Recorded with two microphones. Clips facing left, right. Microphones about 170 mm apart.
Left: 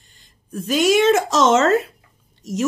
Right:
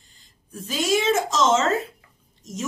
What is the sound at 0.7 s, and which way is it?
A woman's voice, 70° left (ahead or behind).